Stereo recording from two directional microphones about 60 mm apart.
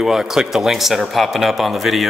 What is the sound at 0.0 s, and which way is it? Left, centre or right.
Speech, centre.